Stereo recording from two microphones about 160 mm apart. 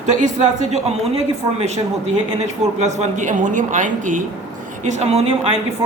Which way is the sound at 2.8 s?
50° right (ahead or behind).